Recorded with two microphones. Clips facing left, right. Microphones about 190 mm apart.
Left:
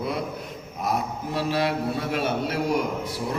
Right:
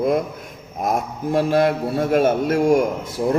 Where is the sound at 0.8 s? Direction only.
50° right (ahead or behind).